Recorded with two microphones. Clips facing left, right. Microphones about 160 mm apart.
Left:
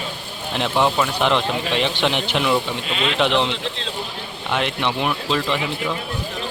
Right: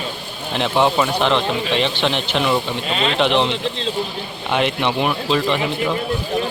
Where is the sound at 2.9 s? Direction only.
35° right (ahead or behind).